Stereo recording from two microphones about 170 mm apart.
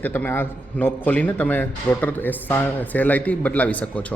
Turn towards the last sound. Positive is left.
turn(degrees=10)  # may be behind; listen again after turning